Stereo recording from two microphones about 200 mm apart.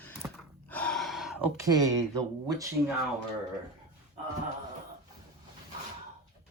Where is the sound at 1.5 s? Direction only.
15° right (ahead or behind).